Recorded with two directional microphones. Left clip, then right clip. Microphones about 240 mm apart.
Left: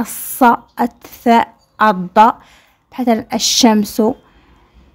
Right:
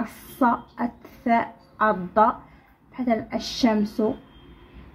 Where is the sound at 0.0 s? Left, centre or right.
Left.